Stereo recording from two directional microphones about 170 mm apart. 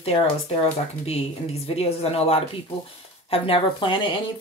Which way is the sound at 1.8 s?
35° left (ahead or behind).